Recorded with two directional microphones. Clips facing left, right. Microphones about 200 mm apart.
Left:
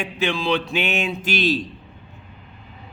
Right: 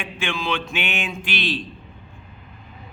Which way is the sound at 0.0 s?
35° left (ahead or behind).